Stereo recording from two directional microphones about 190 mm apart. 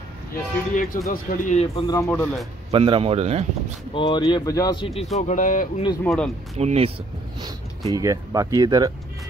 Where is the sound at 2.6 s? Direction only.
30° right (ahead or behind).